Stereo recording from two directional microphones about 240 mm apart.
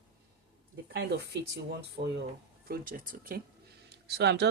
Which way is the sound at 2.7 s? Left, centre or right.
Right.